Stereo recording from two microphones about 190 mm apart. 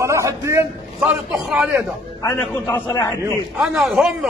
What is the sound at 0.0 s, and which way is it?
A man's voice, 15° right (ahead or behind).